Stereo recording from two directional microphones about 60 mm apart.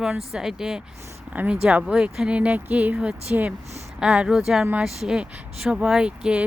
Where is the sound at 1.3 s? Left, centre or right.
Right.